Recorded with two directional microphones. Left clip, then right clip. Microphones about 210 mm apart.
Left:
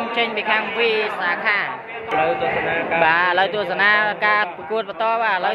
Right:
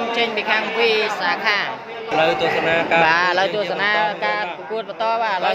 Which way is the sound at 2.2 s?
50° right (ahead or behind).